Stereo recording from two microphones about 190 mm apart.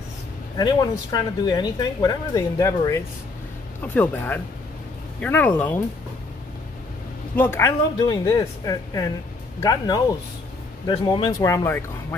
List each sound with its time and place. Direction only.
0.6 s speech: 20° left (ahead or behind)
7.3 s speech: 10° left (ahead or behind)